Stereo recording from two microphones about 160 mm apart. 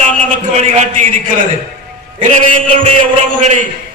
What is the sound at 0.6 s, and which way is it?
Speech, 45° right (ahead or behind).